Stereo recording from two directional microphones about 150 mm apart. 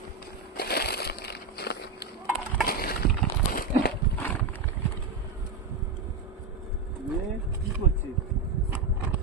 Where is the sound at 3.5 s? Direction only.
75° left (ahead or behind).